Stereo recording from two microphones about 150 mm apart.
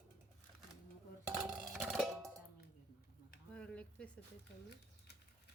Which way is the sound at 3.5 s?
10° left (ahead or behind).